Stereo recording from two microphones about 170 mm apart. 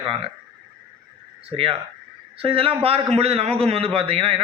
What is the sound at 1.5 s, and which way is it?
A man's voice, 35° right (ahead or behind).